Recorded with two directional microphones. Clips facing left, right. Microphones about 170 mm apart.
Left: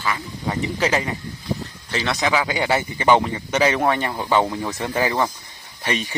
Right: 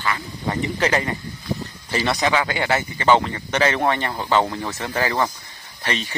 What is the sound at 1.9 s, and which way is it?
Speech, 5° right (ahead or behind).